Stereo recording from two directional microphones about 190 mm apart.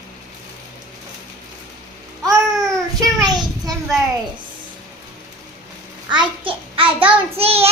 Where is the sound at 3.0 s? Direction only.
20° right (ahead or behind).